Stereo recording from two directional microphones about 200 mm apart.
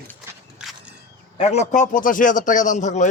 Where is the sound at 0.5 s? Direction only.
5° right (ahead or behind).